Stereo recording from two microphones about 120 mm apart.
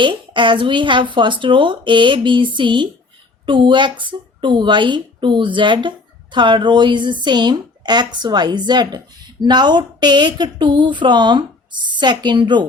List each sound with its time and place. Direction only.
0.0 s speech: 45° right (ahead or behind)